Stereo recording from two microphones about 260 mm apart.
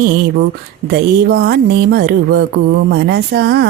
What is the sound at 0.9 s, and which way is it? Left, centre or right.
Mantra, right.